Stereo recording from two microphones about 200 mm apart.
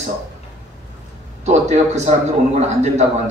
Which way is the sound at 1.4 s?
35° right (ahead or behind).